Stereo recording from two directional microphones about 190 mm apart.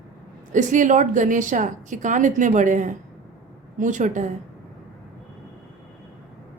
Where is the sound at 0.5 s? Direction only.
40° right (ahead or behind).